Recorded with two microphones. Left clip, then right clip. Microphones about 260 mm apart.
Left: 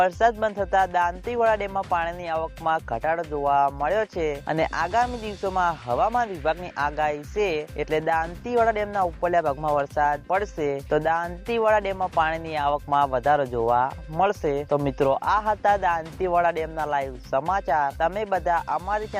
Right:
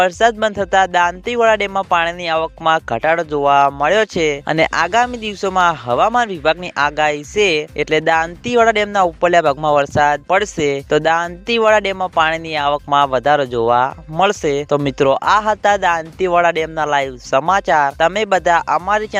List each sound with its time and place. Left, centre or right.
0.0 s speech: right